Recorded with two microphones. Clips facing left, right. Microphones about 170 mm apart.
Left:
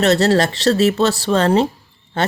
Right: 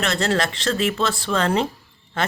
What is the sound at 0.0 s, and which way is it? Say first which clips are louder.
Speech: left 8 dB; 40° left (ahead or behind).